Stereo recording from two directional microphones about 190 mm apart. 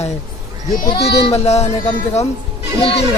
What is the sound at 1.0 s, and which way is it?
Speech, 60° left (ahead or behind).